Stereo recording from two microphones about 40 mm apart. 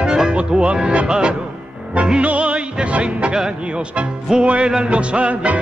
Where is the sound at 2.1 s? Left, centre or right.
Right.